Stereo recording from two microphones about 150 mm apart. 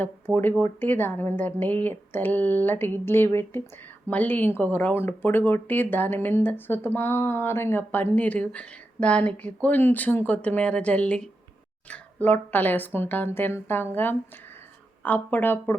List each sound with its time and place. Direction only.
0.3 s speech: 15° right (ahead or behind)
0.6 s speech: 15° left (ahead or behind)